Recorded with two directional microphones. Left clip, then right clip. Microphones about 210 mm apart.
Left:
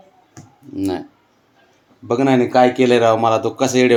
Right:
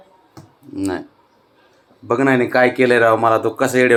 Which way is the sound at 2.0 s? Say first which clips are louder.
Even; 10° left (ahead or behind).